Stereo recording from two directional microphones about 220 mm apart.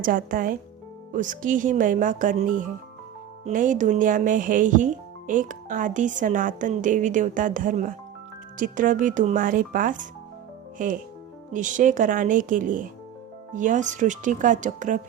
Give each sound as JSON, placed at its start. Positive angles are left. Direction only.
{"t": 0.0, "sound": "speech", "side_deg": -40}